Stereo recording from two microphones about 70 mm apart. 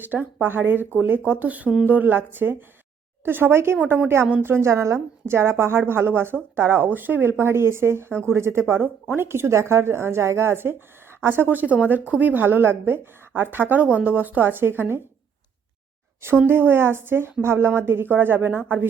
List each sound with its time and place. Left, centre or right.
0.0 s speech: right
3.8 s speech: right
4.4 s speech: right
8.8 s speech: right
16.5 s speech: right